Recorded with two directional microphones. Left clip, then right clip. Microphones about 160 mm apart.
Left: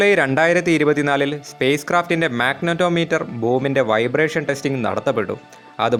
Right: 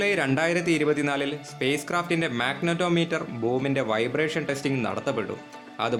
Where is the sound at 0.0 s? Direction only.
50° left (ahead or behind).